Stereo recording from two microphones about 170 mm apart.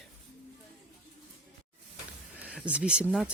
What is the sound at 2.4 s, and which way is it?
Speech, 10° right (ahead or behind).